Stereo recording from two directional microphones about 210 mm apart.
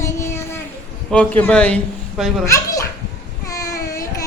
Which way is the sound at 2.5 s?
15° left (ahead or behind).